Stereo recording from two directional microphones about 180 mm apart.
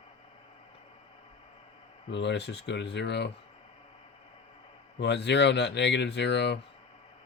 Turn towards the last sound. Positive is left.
turn(degrees=75)  # may be behind; listen again after turning